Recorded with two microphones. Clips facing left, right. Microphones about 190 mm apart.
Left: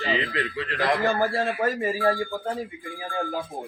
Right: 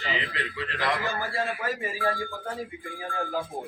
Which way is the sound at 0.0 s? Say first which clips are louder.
Left 6 dB; 35° left (ahead or behind).